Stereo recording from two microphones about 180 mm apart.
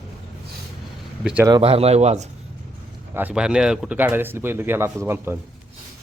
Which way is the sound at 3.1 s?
5° right (ahead or behind).